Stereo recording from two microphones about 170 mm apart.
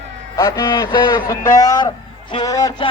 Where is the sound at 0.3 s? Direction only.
20° left (ahead or behind).